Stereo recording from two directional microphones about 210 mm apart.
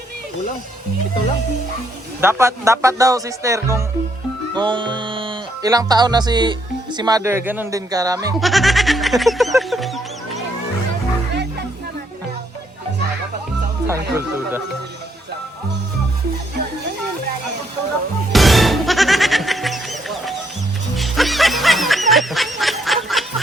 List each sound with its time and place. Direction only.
2.2 s speech: 15° right (ahead or behind)
4.5 s music: 20° right (ahead or behind)
8.4 s fowl: centre (ahead or behind)
13.8 s speech: 10° right (ahead or behind)
18.3 s music: centre (ahead or behind)
20.9 s snicker: centre (ahead or behind)